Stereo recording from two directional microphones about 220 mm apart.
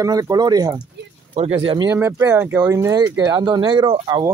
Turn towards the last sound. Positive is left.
turn(degrees=-20)  # may be behind; listen again after turning